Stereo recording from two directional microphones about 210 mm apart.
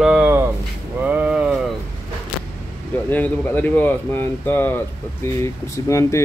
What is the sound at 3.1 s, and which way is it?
Speech, 10° left (ahead or behind).